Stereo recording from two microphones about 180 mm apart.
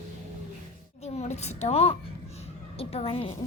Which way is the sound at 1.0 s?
35° left (ahead or behind).